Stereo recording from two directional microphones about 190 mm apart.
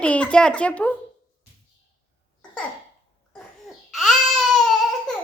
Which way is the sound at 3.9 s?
Centre (ahead or behind).